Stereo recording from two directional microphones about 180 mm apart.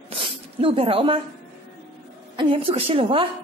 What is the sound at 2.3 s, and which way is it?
Speech, 30° right (ahead or behind).